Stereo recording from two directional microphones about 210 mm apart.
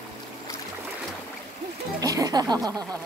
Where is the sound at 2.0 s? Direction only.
15° right (ahead or behind).